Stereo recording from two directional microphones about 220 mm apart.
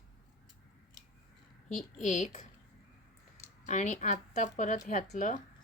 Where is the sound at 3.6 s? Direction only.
35° left (ahead or behind).